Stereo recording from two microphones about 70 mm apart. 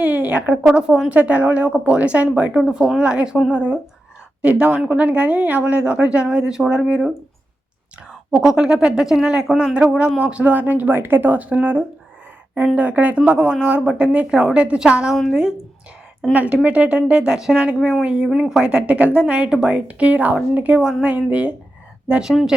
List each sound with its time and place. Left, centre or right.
0.0 s a woman's voice: right
2.6 s speech: centre
8.3 s a woman's voice: centre
16.3 s a woman's voice: right; by 18.7 s centre
18.7 s a woman's voice: centre